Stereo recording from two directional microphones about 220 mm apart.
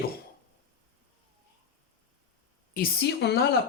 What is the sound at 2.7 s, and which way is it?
Speech, 45° left (ahead or behind).